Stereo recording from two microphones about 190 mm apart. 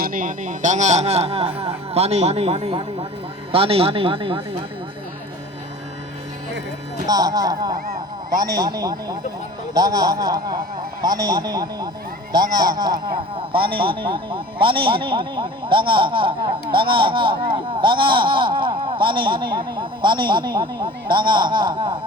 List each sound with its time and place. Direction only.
0.0 s speech: 45° right (ahead or behind); by 4.4 s 25° right (ahead or behind)
7.1 s speech: 20° right (ahead or behind)